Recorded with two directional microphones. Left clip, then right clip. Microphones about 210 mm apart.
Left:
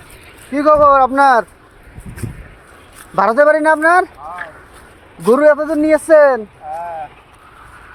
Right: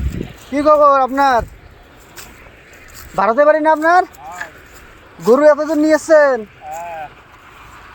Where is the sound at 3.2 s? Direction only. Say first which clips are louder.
Left 1 dB; 20° left (ahead or behind).